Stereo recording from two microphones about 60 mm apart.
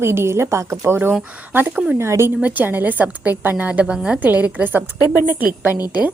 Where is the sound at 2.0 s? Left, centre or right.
Right.